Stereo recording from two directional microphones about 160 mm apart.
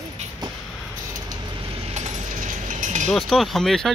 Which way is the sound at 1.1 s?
30° right (ahead or behind).